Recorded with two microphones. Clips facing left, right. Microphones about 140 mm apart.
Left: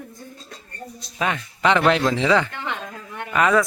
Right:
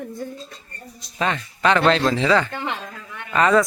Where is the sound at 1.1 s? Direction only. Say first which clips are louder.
Right 1 dB; 10° left (ahead or behind).